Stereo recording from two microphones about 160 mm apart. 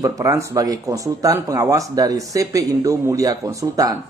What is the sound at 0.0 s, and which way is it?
Speech, 20° right (ahead or behind).